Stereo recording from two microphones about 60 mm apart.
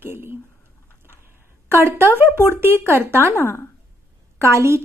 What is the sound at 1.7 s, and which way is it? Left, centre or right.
Speech, right.